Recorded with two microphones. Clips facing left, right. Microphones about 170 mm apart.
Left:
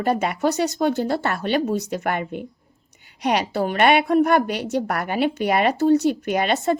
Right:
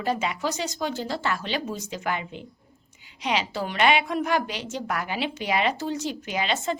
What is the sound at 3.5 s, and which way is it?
A woman's voice, 55° left (ahead or behind).